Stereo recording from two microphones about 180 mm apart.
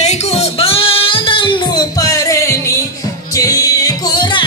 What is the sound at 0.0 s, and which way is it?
Music, 35° left (ahead or behind).